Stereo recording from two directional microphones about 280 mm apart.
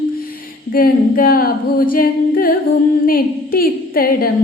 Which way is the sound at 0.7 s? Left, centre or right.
Left.